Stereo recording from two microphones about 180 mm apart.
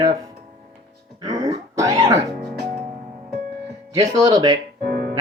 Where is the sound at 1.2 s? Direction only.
20° right (ahead or behind).